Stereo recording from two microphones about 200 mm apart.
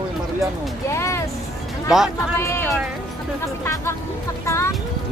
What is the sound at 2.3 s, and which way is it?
Speech, 15° left (ahead or behind).